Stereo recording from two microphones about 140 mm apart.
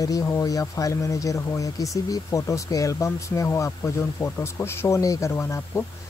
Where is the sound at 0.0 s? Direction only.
25° left (ahead or behind).